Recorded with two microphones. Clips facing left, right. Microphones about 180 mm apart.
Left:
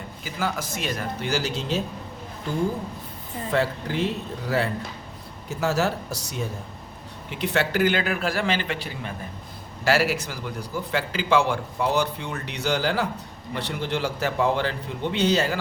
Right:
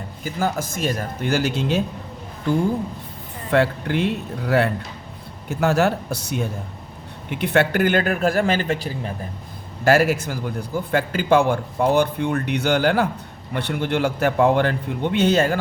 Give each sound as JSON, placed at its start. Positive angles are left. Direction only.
{"t": 0.3, "sound": "a man's voice", "side_deg": -45}
{"t": 3.5, "sound": "a man's voice", "side_deg": -65}